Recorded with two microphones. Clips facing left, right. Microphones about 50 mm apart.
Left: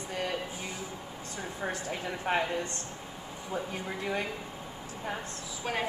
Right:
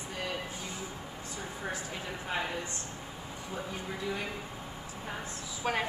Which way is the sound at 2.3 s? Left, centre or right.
Left.